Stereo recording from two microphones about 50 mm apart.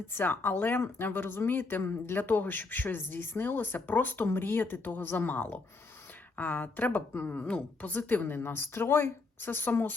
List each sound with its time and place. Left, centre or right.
0.1 s a woman's voice: left
4.3 s a woman's voice: left